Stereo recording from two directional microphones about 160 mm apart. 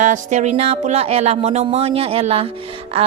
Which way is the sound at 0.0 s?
45° right (ahead or behind).